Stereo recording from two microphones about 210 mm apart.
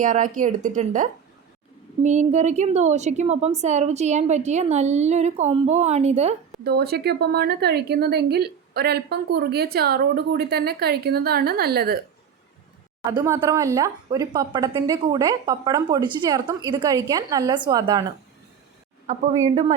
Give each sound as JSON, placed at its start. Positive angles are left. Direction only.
{"t": 0.0, "sound": "a woman's voice", "side_deg": -40}
{"t": 6.7, "sound": "a woman's voice", "side_deg": -50}
{"t": 13.1, "sound": "a woman's voice", "side_deg": -15}
{"t": 19.5, "sound": "speech", "side_deg": -30}